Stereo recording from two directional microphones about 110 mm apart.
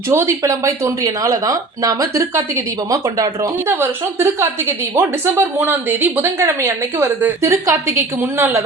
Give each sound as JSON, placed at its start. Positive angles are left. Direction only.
{"t": 0.1, "sound": "speech", "side_deg": -25}